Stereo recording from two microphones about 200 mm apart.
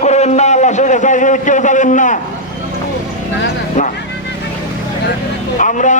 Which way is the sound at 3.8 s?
40° left (ahead or behind).